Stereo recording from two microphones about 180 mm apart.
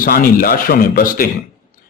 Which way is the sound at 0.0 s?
50° left (ahead or behind).